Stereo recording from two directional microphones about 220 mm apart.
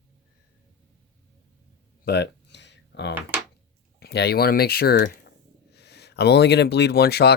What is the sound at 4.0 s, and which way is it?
Speech, 50° left (ahead or behind).